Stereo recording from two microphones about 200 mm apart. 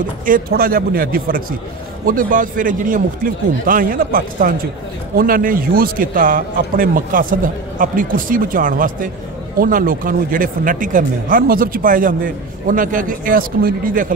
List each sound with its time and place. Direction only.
0.2 s a man's voice: 45° right (ahead or behind)